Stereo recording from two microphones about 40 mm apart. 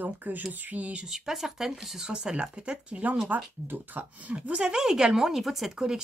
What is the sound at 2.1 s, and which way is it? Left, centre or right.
Speech, right.